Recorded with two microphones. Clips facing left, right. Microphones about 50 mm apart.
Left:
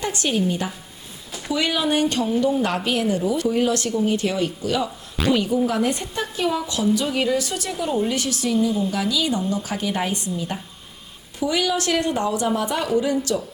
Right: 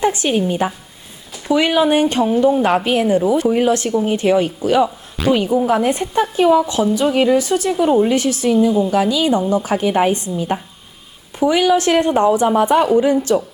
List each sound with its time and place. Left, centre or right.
0.0 s a woman's voice: centre